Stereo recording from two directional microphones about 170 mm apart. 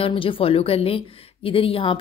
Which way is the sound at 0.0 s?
30° left (ahead or behind).